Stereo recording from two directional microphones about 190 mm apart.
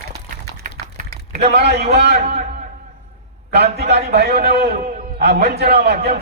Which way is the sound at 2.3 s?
35° right (ahead or behind).